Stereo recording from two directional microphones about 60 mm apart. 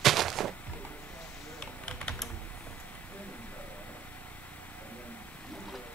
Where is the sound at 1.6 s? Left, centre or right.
Centre.